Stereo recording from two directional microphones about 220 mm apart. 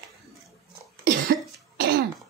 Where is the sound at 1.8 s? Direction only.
45° right (ahead or behind).